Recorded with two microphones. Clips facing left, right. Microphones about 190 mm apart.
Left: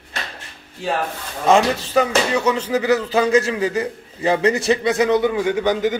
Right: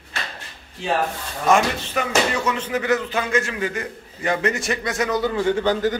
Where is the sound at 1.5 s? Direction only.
35° left (ahead or behind).